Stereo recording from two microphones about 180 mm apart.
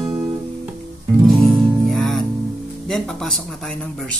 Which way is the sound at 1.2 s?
Centre (ahead or behind).